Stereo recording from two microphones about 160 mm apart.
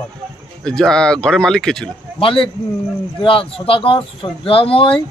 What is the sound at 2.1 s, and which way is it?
Speech, 35° left (ahead or behind).